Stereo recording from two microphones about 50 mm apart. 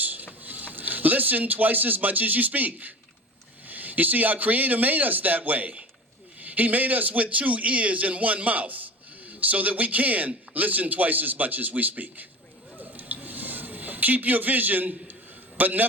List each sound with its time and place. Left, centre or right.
0.0 s printer: right
0.4 s a man's voice: right
12.8 s a sound: right
15.5 s a man's voice: right